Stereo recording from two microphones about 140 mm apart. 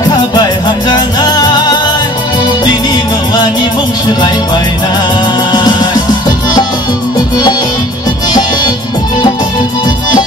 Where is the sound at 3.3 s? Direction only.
30° left (ahead or behind).